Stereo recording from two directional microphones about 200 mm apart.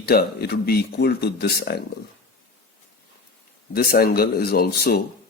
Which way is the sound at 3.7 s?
50° left (ahead or behind).